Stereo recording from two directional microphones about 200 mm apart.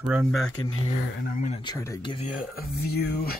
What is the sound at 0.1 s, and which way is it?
Speech, 5° right (ahead or behind).